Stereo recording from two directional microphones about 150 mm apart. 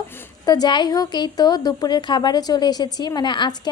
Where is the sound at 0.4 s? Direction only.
25° left (ahead or behind).